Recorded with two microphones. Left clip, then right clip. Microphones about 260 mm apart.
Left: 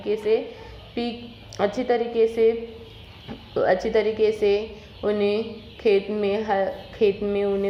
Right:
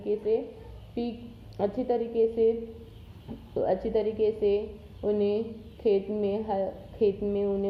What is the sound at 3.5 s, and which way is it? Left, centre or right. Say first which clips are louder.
A woman's voice: left 6 dB; centre.